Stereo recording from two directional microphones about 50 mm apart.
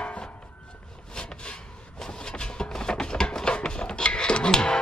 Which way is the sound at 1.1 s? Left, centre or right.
Centre.